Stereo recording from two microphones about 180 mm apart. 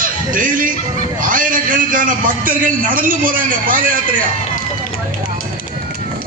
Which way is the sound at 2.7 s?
50° right (ahead or behind).